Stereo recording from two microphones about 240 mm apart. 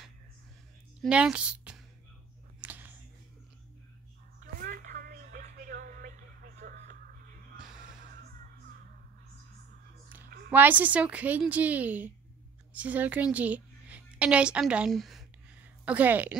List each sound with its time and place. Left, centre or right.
1.0 s a woman's voice: centre
2.6 s a sound: centre
4.6 s music: right
10.5 s a woman's voice: centre